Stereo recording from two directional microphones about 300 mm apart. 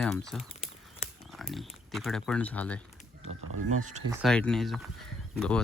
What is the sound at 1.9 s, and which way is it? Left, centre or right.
Speech, centre.